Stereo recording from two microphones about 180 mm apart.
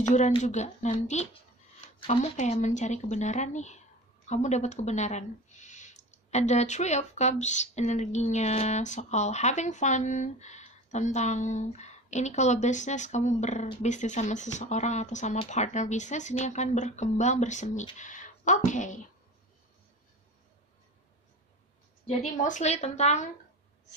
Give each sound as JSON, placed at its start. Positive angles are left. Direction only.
{"t": 0.0, "sound": "speech", "side_deg": 40}
{"t": 22.0, "sound": "speech", "side_deg": 45}